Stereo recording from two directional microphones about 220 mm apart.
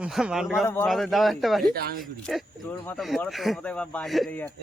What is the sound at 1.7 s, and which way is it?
Speech, 45° right (ahead or behind).